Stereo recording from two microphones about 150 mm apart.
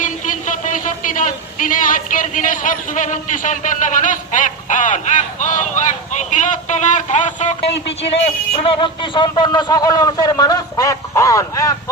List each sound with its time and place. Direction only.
0.0 s speech: 60° left (ahead or behind)
7.9 s a man's voice: 40° left (ahead or behind); by 11.7 s 20° left (ahead or behind)